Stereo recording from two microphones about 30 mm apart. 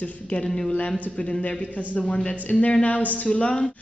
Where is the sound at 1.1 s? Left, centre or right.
Left.